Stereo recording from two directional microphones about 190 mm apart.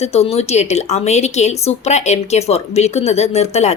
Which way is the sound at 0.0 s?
35° left (ahead or behind).